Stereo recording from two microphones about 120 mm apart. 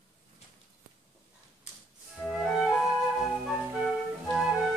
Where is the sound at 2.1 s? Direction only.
Centre (ahead or behind).